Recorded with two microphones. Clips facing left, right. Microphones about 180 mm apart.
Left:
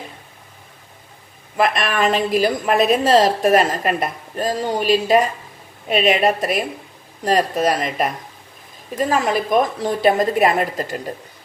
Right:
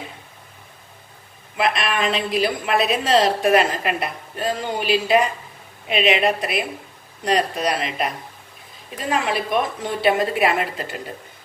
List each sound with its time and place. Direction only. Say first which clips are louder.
1.6 s a woman's voice: left 3 dB; 45° left (ahead or behind)